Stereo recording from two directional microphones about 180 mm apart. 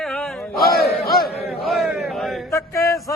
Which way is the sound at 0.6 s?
60° left (ahead or behind).